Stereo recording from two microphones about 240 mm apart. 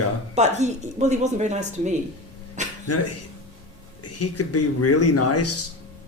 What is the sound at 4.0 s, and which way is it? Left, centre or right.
Speech, left.